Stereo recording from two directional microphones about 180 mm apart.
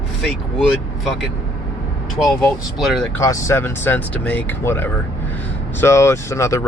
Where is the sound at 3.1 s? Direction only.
15° left (ahead or behind).